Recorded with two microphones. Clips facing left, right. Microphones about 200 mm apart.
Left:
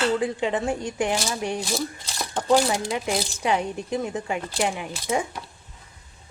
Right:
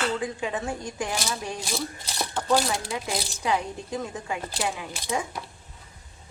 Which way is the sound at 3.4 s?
20° left (ahead or behind).